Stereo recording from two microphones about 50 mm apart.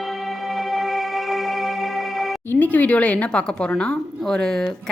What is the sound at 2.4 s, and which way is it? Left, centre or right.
A woman's voice, left.